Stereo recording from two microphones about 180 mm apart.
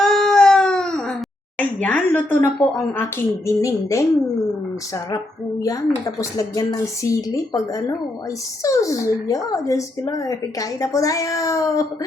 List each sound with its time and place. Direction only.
0.0 s baby cry: centre (ahead or behind)
1.5 s speech: 10° left (ahead or behind)
5.1 s speech: 20° left (ahead or behind)